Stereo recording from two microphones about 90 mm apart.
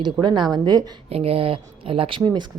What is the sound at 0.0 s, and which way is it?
Speech, 55° right (ahead or behind).